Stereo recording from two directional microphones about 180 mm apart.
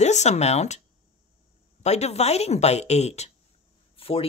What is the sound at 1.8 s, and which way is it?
Speech, 40° left (ahead or behind).